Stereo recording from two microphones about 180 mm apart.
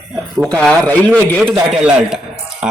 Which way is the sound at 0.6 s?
5° left (ahead or behind).